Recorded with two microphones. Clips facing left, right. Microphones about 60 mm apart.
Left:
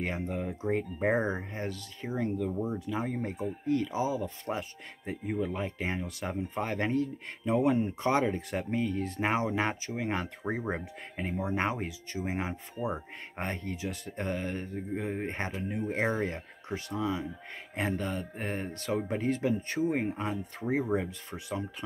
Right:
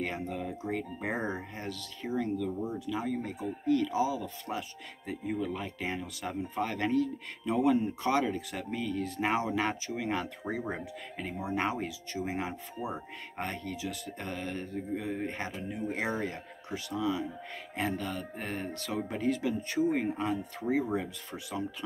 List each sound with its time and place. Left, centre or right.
0.0 s speech: left